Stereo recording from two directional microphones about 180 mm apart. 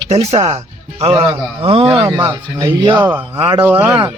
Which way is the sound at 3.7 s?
10° right (ahead or behind).